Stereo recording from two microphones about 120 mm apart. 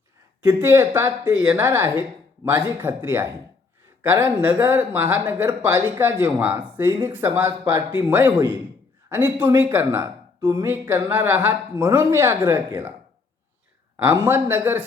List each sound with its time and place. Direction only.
0.4 s speech: 20° right (ahead or behind)
14.0 s speech: 20° right (ahead or behind)